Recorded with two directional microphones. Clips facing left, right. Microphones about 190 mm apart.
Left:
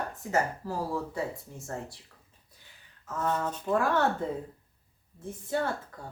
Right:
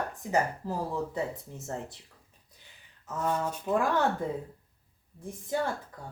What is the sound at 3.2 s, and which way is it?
Speech, 10° right (ahead or behind).